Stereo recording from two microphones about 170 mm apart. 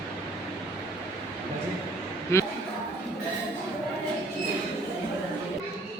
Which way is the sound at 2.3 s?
15° left (ahead or behind).